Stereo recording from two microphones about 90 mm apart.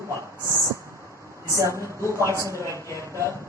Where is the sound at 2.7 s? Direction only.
35° left (ahead or behind).